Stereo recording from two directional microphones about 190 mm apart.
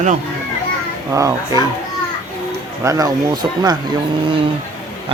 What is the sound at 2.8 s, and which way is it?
Speech, 20° right (ahead or behind).